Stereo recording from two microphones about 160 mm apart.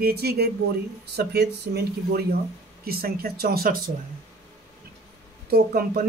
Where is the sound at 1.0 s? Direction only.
90° right.